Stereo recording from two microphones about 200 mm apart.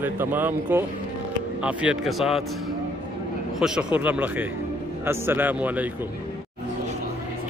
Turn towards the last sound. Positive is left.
turn(degrees=-10)  # may be behind; listen again after turning